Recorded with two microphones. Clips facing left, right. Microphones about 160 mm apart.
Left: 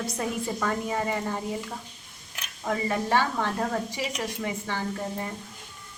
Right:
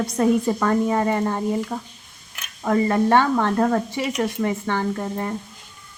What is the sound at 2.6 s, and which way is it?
Speech, 55° right (ahead or behind).